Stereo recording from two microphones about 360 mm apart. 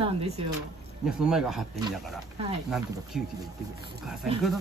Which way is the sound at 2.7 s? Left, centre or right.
Centre.